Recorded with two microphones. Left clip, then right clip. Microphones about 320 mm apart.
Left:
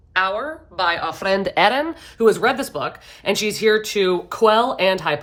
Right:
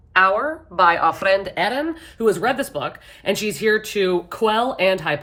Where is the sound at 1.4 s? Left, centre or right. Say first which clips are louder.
Left 5 dB; centre.